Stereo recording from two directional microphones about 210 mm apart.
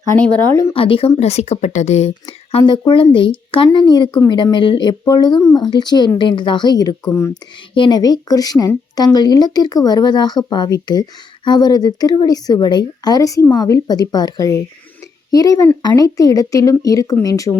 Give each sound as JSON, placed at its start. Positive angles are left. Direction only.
{"t": 0.5, "sound": "speech", "side_deg": 15}
{"t": 0.8, "sound": "a woman's voice", "side_deg": 25}